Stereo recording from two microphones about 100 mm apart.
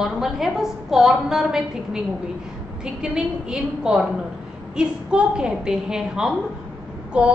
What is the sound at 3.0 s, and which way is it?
A woman's voice, 5° right (ahead or behind).